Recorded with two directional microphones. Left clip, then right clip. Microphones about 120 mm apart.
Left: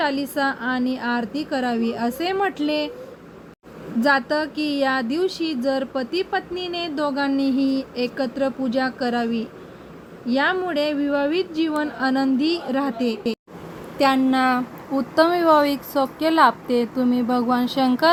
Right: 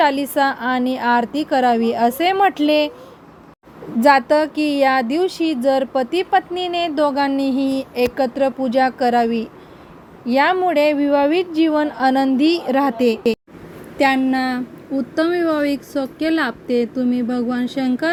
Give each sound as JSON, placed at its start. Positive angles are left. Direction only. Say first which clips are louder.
{"t": 0.0, "sound": "speech", "louder": "right 6 dB", "side_deg": -55}
{"t": 4.0, "sound": "speech", "louder": "right 7 dB", "side_deg": -55}
{"t": 14.0, "sound": "a woman's voice", "louder": "right 1 dB", "side_deg": -20}